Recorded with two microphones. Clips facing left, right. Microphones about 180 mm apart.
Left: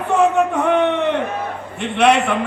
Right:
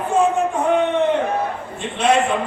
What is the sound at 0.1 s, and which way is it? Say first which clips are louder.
Music: left 2 dB; 65° left (ahead or behind).